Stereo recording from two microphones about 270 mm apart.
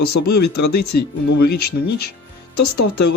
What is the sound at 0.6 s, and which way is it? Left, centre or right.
Speech, left.